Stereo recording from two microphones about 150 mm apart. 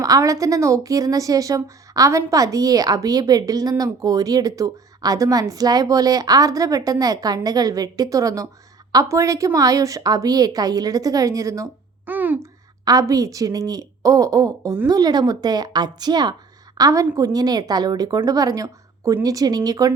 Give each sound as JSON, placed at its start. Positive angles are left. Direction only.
{"t": 0.0, "sound": "a woman's voice", "side_deg": -20}
{"t": 12.8, "sound": "a woman's voice", "side_deg": -25}